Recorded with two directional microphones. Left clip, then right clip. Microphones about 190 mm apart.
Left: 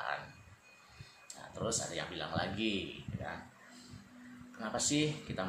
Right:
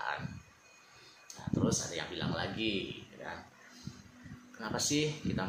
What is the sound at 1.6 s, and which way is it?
Speech, 10° right (ahead or behind).